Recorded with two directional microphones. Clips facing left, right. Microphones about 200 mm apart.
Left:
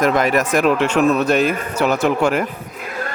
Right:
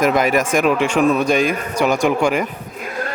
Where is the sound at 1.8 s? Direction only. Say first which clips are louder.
Even; 5° right (ahead or behind).